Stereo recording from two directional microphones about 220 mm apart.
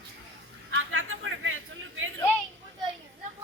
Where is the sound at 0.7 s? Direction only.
65° right (ahead or behind).